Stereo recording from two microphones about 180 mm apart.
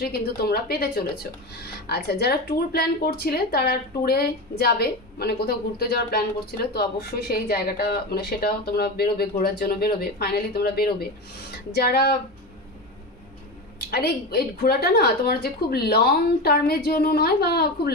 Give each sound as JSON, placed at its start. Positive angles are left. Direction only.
{"t": 0.0, "sound": "speech", "side_deg": 60}
{"t": 13.7, "sound": "speech", "side_deg": 60}